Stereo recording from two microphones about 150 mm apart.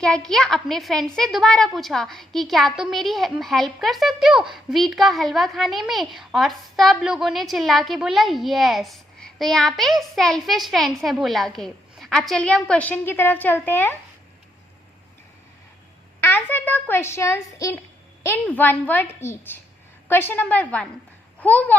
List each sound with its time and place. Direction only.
0.0 s a woman's voice: 5° left (ahead or behind)
16.2 s a child's voice: 15° left (ahead or behind)